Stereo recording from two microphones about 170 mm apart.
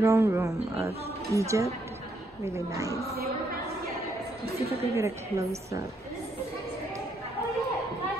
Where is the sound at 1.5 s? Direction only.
15° right (ahead or behind).